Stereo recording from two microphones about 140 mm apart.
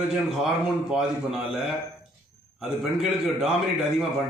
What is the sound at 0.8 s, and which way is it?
Speech, 5° right (ahead or behind).